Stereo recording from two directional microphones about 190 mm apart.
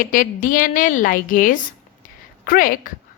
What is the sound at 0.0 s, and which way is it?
A woman's voice, 45° left (ahead or behind).